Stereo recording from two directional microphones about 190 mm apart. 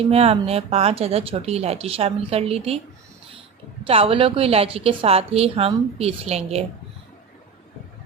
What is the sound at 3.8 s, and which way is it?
Speech, 30° right (ahead or behind).